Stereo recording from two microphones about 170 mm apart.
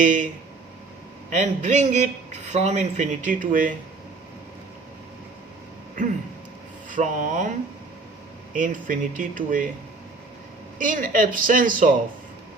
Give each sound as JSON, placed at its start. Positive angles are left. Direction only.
{"t": 0.0, "sound": "speech", "side_deg": -50}
{"t": 1.3, "sound": "speech", "side_deg": -45}
{"t": 6.9, "sound": "speech", "side_deg": -50}
{"t": 8.5, "sound": "speech", "side_deg": -50}
{"t": 10.8, "sound": "speech", "side_deg": -50}